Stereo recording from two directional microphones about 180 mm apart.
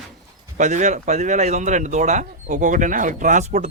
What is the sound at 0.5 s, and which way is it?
Speech, 40° right (ahead or behind).